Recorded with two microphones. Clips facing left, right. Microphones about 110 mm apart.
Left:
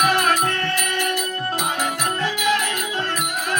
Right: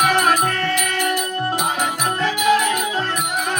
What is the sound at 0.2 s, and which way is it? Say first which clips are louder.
Music: right 2 dB; 25° right (ahead or behind).